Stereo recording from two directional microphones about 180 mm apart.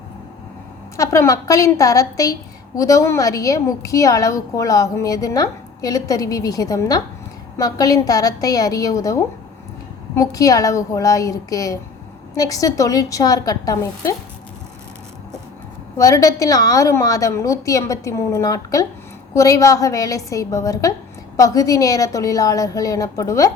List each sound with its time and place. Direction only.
0.9 s a woman's voice: 15° left (ahead or behind)
16.0 s a woman's voice: 20° left (ahead or behind)